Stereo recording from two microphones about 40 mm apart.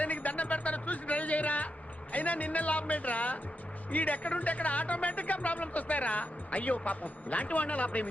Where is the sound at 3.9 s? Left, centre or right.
Left.